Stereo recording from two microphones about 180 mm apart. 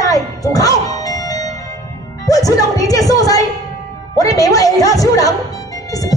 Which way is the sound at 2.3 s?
20° left (ahead or behind).